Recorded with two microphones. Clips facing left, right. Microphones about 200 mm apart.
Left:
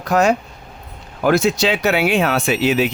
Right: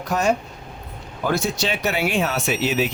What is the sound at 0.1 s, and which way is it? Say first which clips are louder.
Speech: left 5 dB; 90° left.